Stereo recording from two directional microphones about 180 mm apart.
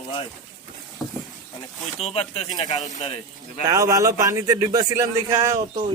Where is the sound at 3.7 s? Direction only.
20° right (ahead or behind).